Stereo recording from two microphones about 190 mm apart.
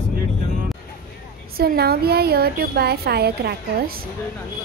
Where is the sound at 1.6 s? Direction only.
55° right (ahead or behind).